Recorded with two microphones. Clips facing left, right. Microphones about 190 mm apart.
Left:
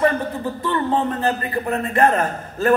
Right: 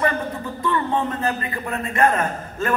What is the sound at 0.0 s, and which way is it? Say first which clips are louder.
A man's voice: left 4 dB; 35° left (ahead or behind).